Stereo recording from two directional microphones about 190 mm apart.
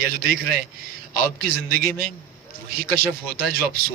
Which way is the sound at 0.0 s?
50° right (ahead or behind).